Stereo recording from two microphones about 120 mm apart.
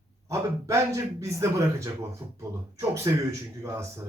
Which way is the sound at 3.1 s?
25° right (ahead or behind).